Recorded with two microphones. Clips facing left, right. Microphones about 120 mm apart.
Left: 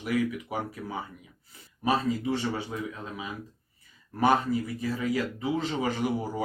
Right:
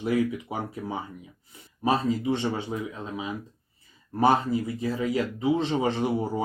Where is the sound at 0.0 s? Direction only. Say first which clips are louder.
Right 3 dB; 25° right (ahead or behind).